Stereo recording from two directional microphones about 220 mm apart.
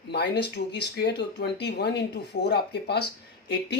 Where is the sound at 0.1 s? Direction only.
50° left (ahead or behind).